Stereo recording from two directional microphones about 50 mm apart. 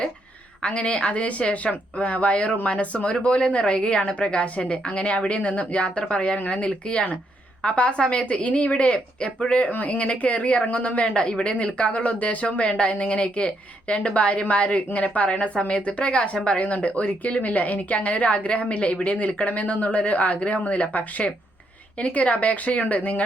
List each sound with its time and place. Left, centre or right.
0.6 s speech: left